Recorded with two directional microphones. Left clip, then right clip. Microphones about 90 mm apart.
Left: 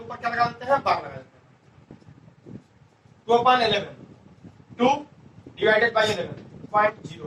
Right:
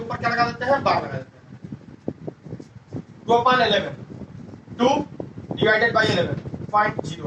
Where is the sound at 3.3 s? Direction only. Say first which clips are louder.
Right 1 dB; 30° right (ahead or behind).